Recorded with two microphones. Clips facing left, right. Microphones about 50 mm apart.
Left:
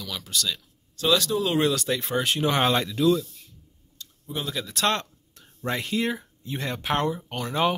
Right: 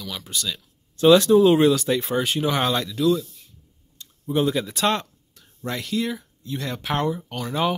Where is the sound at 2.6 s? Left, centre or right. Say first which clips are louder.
Even; centre.